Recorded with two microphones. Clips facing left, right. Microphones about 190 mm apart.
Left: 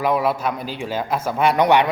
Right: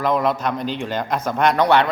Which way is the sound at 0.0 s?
10° left (ahead or behind).